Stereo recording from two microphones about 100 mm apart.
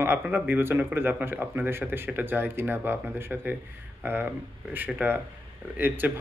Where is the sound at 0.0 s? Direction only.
20° right (ahead or behind).